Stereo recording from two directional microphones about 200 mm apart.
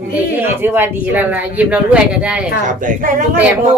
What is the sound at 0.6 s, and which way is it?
Speech, 10° right (ahead or behind).